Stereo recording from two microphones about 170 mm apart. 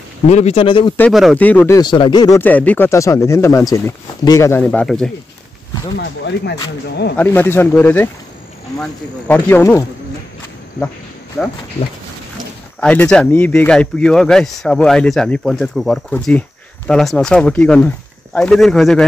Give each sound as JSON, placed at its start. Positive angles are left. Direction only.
{"t": 0.3, "sound": "speech", "side_deg": 40}
{"t": 1.1, "sound": "speech", "side_deg": 0}
{"t": 1.4, "sound": "speech", "side_deg": 10}
{"t": 1.8, "sound": "speech", "side_deg": 25}
{"t": 2.4, "sound": "speech", "side_deg": 10}
{"t": 5.9, "sound": "speech", "side_deg": 75}
{"t": 7.2, "sound": "speech", "side_deg": 10}
{"t": 11.4, "sound": "speech", "side_deg": 0}
{"t": 12.8, "sound": "speech", "side_deg": 10}